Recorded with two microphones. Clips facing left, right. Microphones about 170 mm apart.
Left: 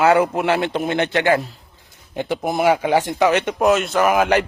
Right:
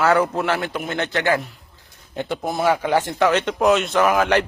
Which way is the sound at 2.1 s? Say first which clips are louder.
Left 3 dB; 10° left (ahead or behind).